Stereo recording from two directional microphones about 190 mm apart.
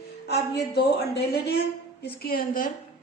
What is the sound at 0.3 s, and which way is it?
A woman's voice, 60° left (ahead or behind).